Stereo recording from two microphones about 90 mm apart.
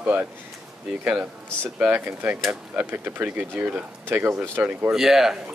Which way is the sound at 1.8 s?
15° right (ahead or behind).